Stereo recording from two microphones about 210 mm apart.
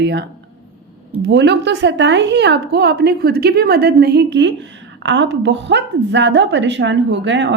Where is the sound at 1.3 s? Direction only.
55° right (ahead or behind).